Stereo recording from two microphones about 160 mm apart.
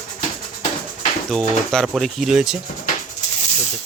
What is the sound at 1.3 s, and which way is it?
Speech, 5° left (ahead or behind).